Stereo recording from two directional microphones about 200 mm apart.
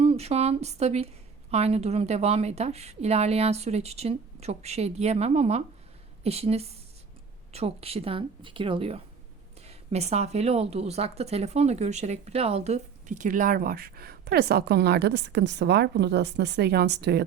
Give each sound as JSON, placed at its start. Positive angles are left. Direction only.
{"t": 0.0, "sound": "a woman's voice", "side_deg": -30}